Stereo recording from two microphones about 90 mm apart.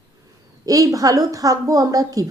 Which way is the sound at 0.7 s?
40° right (ahead or behind).